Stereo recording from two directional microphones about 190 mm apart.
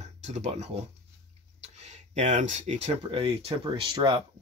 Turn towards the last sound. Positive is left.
turn(degrees=-25)  # may be behind; listen again after turning